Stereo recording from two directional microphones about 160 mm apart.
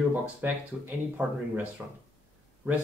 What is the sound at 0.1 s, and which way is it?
Speech, 10° right (ahead or behind).